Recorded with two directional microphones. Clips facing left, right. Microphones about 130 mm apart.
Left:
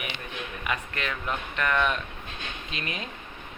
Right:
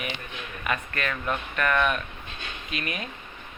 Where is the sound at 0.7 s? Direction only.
15° left (ahead or behind).